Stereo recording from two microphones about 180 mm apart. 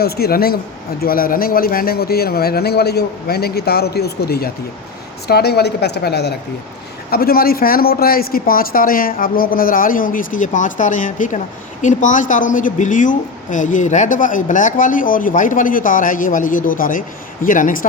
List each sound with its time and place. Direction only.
0.0 s a woman's voice: 60° left (ahead or behind)